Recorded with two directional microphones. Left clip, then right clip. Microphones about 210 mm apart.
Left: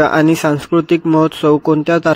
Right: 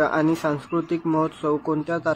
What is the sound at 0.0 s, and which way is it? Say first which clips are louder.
A man's voice: left 9 dB; 40° left (ahead or behind).